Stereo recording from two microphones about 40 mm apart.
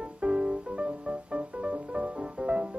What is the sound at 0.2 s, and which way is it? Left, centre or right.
Music, right.